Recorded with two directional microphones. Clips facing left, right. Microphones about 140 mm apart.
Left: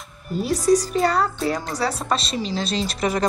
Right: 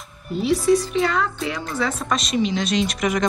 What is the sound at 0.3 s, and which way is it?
A woman's voice, 40° left (ahead or behind).